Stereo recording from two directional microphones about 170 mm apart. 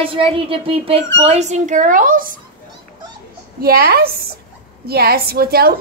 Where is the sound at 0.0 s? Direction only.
30° right (ahead or behind); by 2.3 s 55° right (ahead or behind).